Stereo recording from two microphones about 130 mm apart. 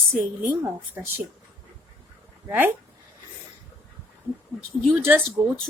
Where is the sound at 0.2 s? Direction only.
15° right (ahead or behind).